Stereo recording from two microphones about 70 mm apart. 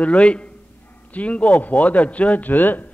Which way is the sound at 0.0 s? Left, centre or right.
Centre.